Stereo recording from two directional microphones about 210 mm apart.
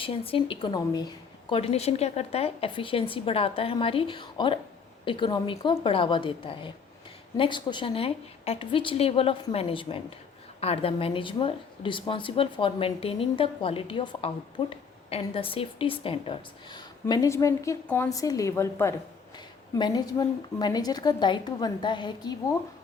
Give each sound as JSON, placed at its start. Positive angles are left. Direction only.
{"t": 0.0, "sound": "a woman's voice", "side_deg": 25}